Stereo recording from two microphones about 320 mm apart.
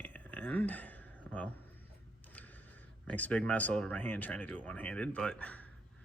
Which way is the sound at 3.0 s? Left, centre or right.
Centre.